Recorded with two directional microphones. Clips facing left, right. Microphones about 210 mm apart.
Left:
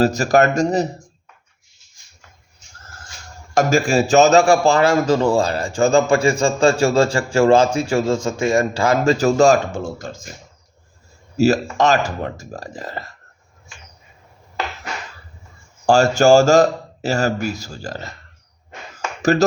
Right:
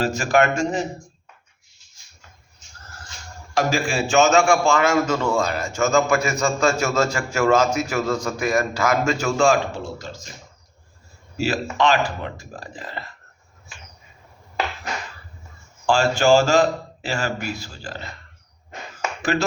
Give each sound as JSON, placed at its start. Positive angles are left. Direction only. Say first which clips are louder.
{"t": 0.0, "sound": "a man's voice", "louder": "left 4 dB", "side_deg": 40}
{"t": 3.5, "sound": "a man's voice", "louder": "left 6 dB", "side_deg": 45}
{"t": 11.3, "sound": "speech", "louder": "left 6 dB", "side_deg": 45}
{"t": 15.9, "sound": "speech", "louder": "left 5 dB", "side_deg": 45}
{"t": 19.2, "sound": "speech", "louder": "left 8 dB", "side_deg": 40}